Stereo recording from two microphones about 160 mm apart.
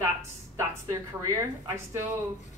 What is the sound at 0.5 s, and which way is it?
A man's voice, 20° right (ahead or behind).